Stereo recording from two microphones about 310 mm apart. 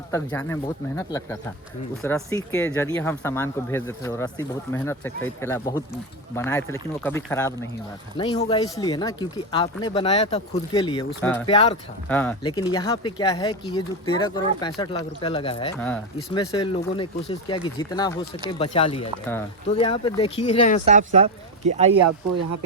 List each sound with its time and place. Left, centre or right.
0.1 s speech: centre
11.4 s speech: centre
12.0 s speech: centre
12.4 s speech: centre
20.8 s speech: right